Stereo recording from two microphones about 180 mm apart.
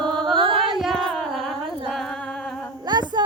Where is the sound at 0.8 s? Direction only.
Centre (ahead or behind).